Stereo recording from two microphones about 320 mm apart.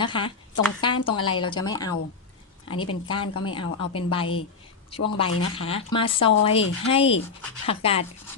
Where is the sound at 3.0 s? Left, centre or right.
Centre.